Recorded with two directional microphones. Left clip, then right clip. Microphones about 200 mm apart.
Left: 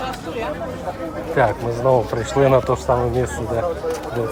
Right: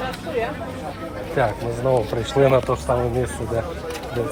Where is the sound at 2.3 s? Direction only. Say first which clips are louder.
Left 2 dB; 10° left (ahead or behind).